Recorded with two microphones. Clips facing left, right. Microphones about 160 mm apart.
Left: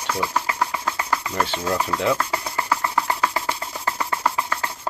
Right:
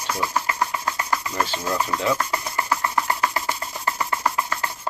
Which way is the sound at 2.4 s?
30° left (ahead or behind).